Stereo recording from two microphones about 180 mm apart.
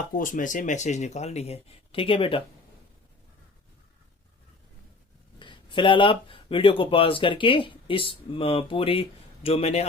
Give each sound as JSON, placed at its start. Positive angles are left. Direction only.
{"t": 0.1, "sound": "speech", "side_deg": 50}
{"t": 5.4, "sound": "speech", "side_deg": 25}